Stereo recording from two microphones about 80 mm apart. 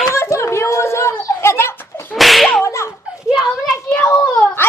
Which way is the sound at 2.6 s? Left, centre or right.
Left.